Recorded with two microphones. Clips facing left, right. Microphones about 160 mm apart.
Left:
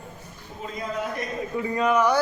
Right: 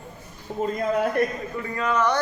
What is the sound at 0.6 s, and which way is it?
Speech, 55° right (ahead or behind).